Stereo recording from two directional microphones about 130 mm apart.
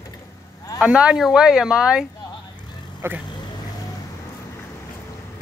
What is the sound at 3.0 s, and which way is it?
Speech, 20° right (ahead or behind).